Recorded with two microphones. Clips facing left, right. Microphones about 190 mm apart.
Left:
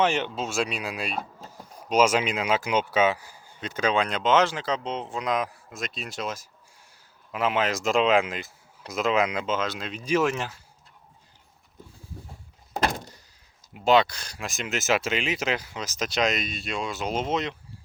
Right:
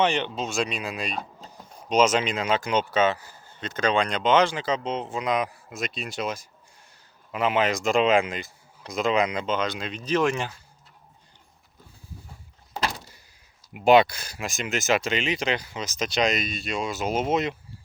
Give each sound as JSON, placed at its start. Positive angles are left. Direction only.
{"t": 0.0, "sound": "speech", "side_deg": 5}
{"t": 12.7, "sound": "door", "side_deg": 50}
{"t": 13.7, "sound": "speech", "side_deg": -15}